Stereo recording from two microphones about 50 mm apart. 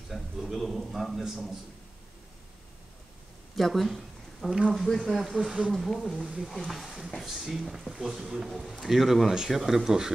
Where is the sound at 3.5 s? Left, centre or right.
Centre.